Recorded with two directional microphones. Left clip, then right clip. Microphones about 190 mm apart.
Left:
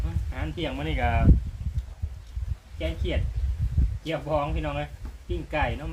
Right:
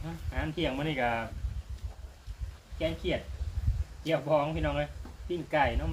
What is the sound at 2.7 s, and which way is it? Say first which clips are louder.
Speech: even; 15° left (ahead or behind).